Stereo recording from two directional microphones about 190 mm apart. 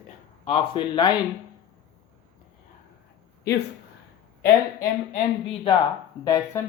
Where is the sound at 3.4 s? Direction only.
60° left (ahead or behind).